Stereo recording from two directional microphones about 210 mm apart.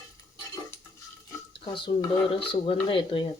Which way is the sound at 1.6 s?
25° left (ahead or behind).